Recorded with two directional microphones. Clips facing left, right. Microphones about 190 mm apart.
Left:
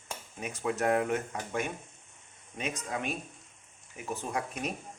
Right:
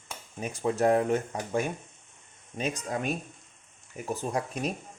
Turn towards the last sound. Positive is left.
turn(degrees=-35)  # may be behind; listen again after turning